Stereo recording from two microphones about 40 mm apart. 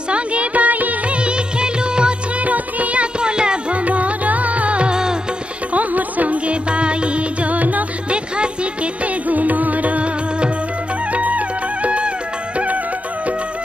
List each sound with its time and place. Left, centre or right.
0.1 s music: right
1.2 s music: right
2.4 s music: right
3.8 s music: right
9.0 s music: right
11.1 s music: right